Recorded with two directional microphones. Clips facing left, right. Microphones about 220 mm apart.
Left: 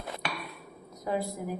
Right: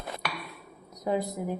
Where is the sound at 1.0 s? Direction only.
20° right (ahead or behind).